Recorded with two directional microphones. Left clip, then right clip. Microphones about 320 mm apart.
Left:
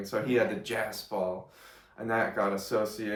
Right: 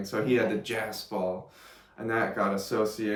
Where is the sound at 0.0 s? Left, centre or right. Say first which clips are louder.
Right 1 dB; centre.